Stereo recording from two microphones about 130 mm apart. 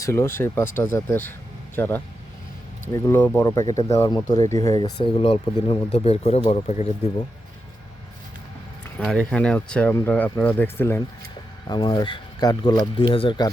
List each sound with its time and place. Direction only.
0.0 s speech: 20° left (ahead or behind)
3.5 s speech: 25° left (ahead or behind); by 6.4 s 50° left (ahead or behind)
9.0 s speech: 5° left (ahead or behind)
11.7 s speech: 35° left (ahead or behind)